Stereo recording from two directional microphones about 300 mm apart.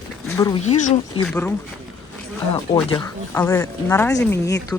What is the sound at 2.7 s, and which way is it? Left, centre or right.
Speech, centre.